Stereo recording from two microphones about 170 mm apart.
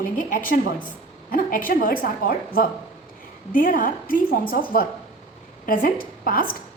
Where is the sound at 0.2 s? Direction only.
55° left (ahead or behind).